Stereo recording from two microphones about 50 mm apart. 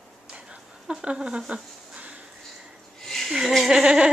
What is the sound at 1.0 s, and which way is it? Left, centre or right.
Speech, centre.